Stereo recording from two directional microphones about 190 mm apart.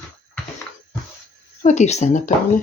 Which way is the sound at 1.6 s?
40° left (ahead or behind).